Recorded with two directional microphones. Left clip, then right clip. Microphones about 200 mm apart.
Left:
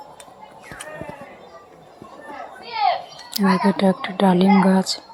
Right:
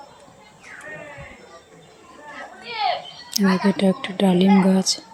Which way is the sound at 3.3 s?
15° right (ahead or behind).